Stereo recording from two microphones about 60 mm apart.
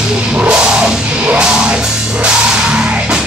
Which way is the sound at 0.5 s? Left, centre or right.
Centre.